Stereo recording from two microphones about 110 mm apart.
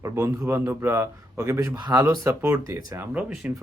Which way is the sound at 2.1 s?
25° right (ahead or behind).